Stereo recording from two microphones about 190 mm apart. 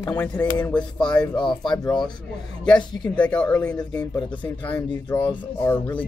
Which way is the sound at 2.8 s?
20° left (ahead or behind).